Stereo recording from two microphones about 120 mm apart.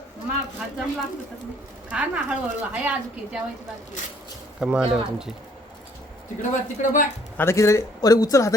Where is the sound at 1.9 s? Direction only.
10° right (ahead or behind).